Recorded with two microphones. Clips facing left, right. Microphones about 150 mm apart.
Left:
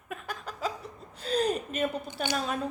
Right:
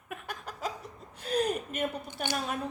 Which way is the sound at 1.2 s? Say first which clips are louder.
Left 2 dB; 30° left (ahead or behind).